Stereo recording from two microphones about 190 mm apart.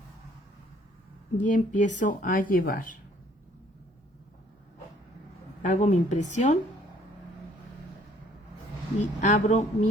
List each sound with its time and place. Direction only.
1.4 s speech: 40° left (ahead or behind)
5.6 s speech: 40° left (ahead or behind)
9.0 s speech: 40° left (ahead or behind)